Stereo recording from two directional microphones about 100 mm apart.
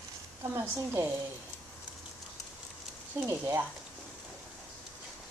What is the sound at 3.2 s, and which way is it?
Speech, 25° right (ahead or behind).